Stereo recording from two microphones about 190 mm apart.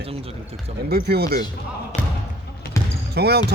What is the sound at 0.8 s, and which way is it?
Speech, 55° right (ahead or behind).